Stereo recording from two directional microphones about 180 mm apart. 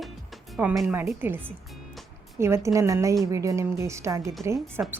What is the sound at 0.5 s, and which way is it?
A woman's voice, centre (ahead or behind).